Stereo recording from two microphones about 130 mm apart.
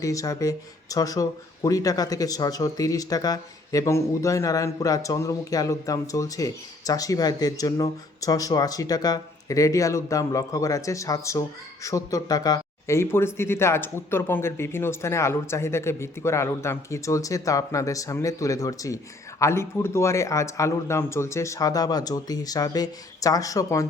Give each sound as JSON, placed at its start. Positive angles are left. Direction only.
{"t": 0.0, "sound": "speech", "side_deg": 25}